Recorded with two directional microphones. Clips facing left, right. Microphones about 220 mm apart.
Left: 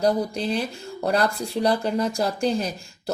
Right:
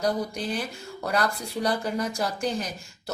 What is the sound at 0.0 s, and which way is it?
A woman's voice, 30° left (ahead or behind).